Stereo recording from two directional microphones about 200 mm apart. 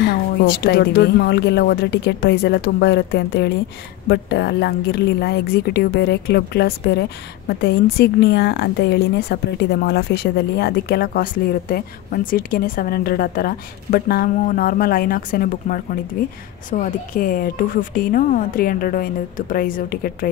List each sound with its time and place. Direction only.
0.0 s a woman's voice: 55° left (ahead or behind)